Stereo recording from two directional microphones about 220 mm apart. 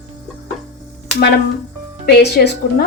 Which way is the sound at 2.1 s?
45° left (ahead or behind).